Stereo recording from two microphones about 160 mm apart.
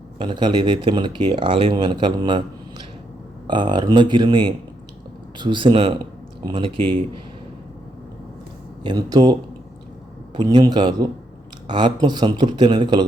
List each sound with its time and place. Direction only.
0.2 s speech: 30° right (ahead or behind)
3.4 s speech: 30° right (ahead or behind)
8.8 s speech: 25° right (ahead or behind)
10.3 s speech: 25° right (ahead or behind)